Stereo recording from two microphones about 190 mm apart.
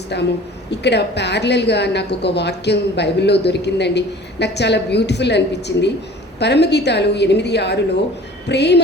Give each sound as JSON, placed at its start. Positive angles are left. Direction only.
{"t": 0.1, "sound": "a woman's voice", "side_deg": 65}